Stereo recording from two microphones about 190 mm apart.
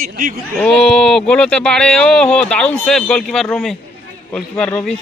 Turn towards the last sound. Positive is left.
turn(degrees=5)  # may be behind; listen again after turning